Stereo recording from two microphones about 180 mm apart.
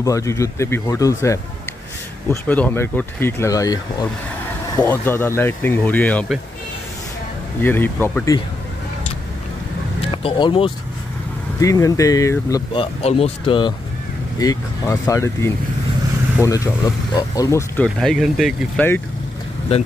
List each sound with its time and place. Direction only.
0.0 s speech: 15° left (ahead or behind)
7.6 s speech: 10° left (ahead or behind)
10.1 s speech: 30° left (ahead or behind)
11.6 s speech: 20° left (ahead or behind)
13.0 s speech: 35° left (ahead or behind); by 17.8 s 15° left (ahead or behind)
17.8 s speech: centre (ahead or behind)